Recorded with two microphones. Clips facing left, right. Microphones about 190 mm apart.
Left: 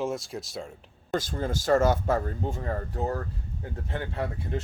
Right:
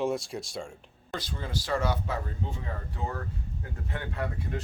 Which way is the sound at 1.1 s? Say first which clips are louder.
Left 6 dB; 45° left (ahead or behind).